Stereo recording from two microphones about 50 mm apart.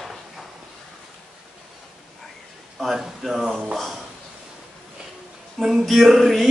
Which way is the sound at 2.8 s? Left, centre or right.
Centre.